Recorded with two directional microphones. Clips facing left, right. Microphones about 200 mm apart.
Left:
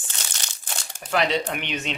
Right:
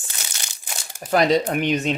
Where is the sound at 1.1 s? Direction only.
40° right (ahead or behind).